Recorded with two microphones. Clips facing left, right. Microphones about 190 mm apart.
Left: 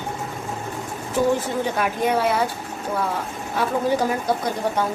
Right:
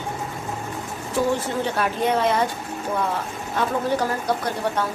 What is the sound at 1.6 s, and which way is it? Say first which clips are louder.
Speech: even; 10° left (ahead or behind).